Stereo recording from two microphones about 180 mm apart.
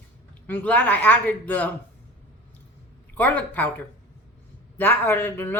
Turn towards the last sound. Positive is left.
turn(degrees=15)  # may be behind; listen again after turning